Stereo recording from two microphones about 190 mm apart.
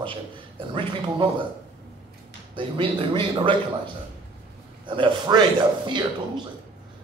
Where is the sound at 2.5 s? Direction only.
25° right (ahead or behind).